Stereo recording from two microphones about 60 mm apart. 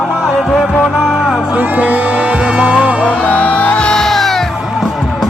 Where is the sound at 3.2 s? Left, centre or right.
Left.